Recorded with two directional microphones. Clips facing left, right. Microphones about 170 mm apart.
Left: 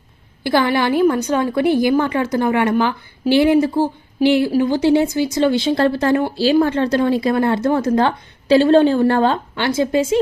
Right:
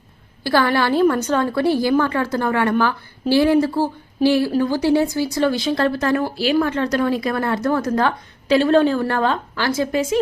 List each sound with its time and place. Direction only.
0.4 s a woman's voice: 20° left (ahead or behind)